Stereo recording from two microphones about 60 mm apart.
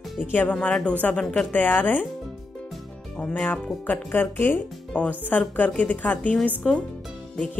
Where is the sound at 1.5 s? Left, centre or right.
Left.